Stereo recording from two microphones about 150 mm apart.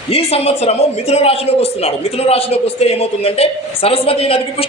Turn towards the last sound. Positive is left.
turn(degrees=40)  # may be behind; listen again after turning